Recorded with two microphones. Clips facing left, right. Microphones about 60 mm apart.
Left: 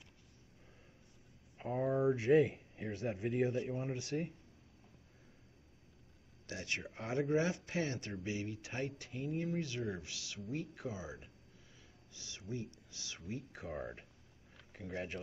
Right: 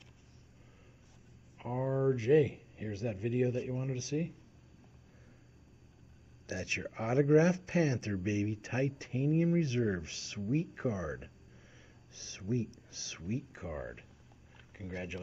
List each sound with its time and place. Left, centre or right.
1.6 s speech: centre
6.4 s speech: right
13.5 s speech: centre